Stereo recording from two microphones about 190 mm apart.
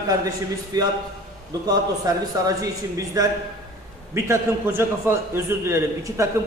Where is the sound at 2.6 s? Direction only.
15° right (ahead or behind).